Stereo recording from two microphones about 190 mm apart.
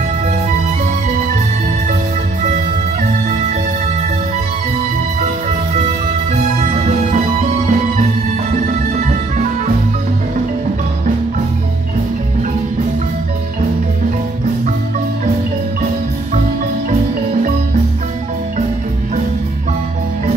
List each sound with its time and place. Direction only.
6.3 s music: 35° right (ahead or behind)